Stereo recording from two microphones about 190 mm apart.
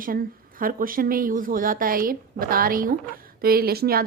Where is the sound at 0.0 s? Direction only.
50° right (ahead or behind).